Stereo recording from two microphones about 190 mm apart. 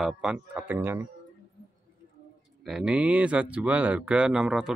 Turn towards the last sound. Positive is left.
turn(degrees=-5)  # may be behind; listen again after turning